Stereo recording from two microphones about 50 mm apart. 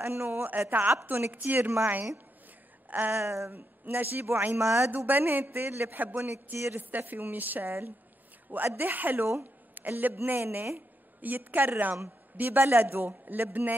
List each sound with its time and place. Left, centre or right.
0.0 s speech: right
0.5 s a woman's voice: right
1.6 s a woman's voice: right
3.1 s speech: right
3.5 s a woman's voice: right
4.9 s a woman's voice: right
6.2 s a woman's voice: right
8.7 s a woman's voice: right
9.4 s a sound: right
10.2 s a woman's voice: right
11.1 s a woman's voice: right